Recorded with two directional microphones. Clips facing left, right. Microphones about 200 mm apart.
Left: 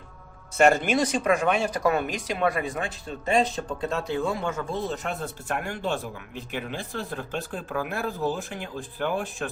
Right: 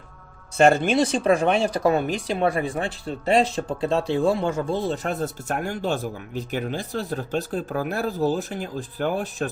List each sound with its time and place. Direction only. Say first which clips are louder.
0.5 s speech: right 3 dB; 30° right (ahead or behind)